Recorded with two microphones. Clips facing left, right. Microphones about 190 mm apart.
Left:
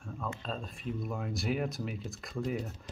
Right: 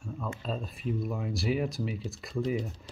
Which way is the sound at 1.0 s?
Centre (ahead or behind).